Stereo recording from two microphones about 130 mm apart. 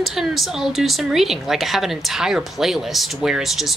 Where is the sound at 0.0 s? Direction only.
Centre (ahead or behind).